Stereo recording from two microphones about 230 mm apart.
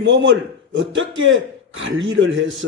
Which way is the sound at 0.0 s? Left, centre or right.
Right.